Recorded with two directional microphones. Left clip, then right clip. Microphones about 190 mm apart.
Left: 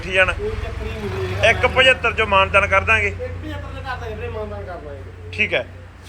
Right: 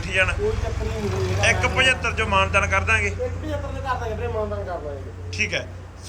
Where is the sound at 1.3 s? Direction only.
5° right (ahead or behind).